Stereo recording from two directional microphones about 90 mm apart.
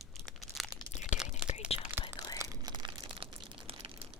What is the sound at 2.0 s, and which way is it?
Whispering, 25° right (ahead or behind).